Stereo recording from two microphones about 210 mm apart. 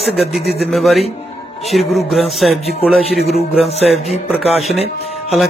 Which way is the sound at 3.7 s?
30° left (ahead or behind).